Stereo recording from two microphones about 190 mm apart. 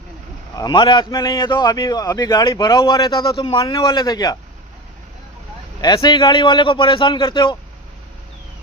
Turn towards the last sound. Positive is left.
turn(degrees=25)  # may be behind; listen again after turning